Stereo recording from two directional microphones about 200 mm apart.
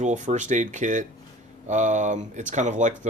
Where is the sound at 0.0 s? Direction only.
35° right (ahead or behind).